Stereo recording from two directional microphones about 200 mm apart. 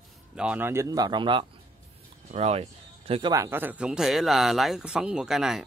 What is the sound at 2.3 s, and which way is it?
Speech, 35° right (ahead or behind).